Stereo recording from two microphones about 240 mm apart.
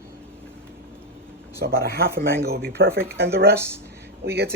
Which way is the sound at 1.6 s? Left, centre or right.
Right.